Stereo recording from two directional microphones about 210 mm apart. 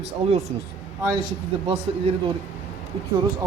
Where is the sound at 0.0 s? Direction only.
30° right (ahead or behind).